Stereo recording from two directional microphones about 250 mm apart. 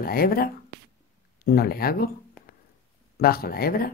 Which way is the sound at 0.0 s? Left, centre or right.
Left.